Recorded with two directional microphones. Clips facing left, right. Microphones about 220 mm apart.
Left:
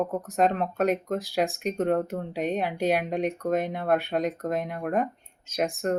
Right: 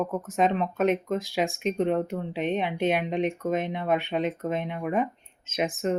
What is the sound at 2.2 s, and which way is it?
Speech, 40° left (ahead or behind).